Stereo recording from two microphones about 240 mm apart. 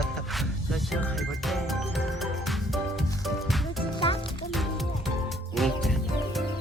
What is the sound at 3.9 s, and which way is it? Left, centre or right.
Music, left.